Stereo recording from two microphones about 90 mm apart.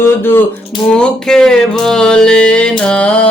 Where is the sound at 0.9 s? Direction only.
10° left (ahead or behind).